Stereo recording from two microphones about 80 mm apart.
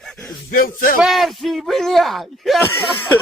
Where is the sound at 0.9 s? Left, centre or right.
Centre.